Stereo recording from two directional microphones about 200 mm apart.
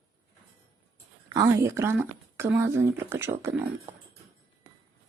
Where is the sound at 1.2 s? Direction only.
15° right (ahead or behind).